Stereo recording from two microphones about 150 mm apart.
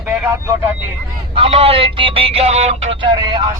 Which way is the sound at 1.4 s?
40° right (ahead or behind).